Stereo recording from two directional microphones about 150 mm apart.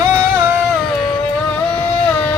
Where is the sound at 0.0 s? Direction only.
10° right (ahead or behind).